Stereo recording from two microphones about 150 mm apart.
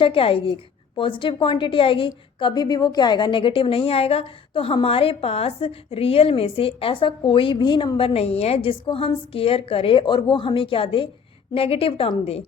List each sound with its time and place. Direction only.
0.0 s a woman's voice: 35° left (ahead or behind)